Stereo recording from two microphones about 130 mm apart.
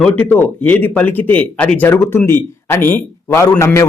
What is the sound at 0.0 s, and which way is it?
A man's voice, 10° left (ahead or behind).